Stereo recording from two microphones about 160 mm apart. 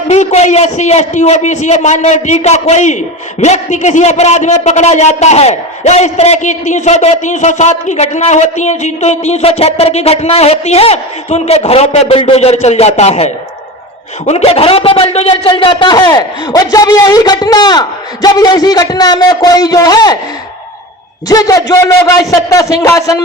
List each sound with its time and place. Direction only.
0.1 s a man's voice: 45° left (ahead or behind); by 20.1 s 25° left (ahead or behind)
21.2 s speech: 20° left (ahead or behind)